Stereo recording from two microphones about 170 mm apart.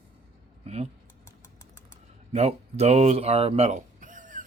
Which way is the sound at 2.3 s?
40° right (ahead or behind).